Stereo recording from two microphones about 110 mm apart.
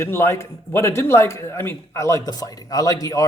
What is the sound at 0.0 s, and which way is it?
Speech, 25° left (ahead or behind).